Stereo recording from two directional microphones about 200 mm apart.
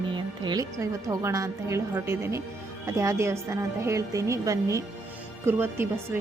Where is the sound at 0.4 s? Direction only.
20° right (ahead or behind).